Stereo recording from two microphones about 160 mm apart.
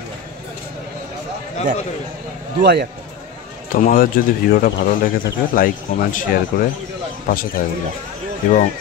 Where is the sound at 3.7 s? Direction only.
60° left (ahead or behind).